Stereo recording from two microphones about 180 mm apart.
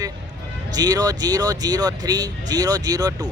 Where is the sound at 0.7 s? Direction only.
20° right (ahead or behind).